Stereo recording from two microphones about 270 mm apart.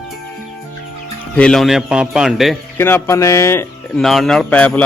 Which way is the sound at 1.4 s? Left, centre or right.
Centre.